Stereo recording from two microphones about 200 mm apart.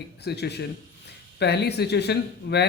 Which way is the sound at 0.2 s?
55° left (ahead or behind).